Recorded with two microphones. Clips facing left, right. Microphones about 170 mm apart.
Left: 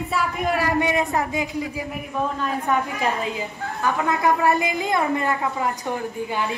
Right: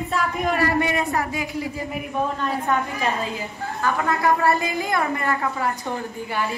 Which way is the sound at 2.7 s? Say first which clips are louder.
Left 2 dB; 15° left (ahead or behind).